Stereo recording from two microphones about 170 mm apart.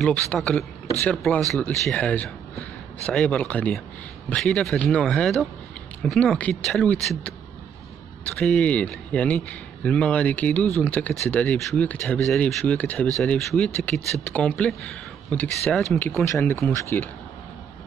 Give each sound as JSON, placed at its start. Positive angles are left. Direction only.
{"t": 0.0, "sound": "speech", "side_deg": 5}
{"t": 8.4, "sound": "speech", "side_deg": 5}